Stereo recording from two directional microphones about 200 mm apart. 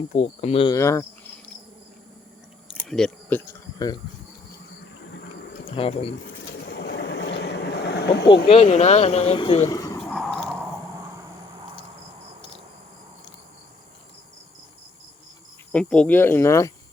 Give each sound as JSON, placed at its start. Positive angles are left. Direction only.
{"t": 0.1, "sound": "speech", "side_deg": 30}
{"t": 0.7, "sound": "speech", "side_deg": 15}
{"t": 2.6, "sound": "a sound", "side_deg": 0}
{"t": 5.7, "sound": "speech", "side_deg": 30}
{"t": 6.7, "sound": "vehicle", "side_deg": 55}
{"t": 8.4, "sound": "speech", "side_deg": 30}
{"t": 10.0, "sound": "a sound", "side_deg": 5}
{"t": 15.7, "sound": "speech", "side_deg": 5}